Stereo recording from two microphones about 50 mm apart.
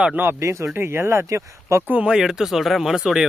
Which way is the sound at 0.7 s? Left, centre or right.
Right.